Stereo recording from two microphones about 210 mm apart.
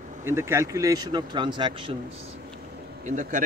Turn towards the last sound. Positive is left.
turn(degrees=-35)  # may be behind; listen again after turning